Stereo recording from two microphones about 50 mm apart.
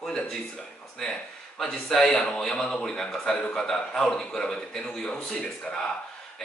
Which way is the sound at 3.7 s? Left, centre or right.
Centre.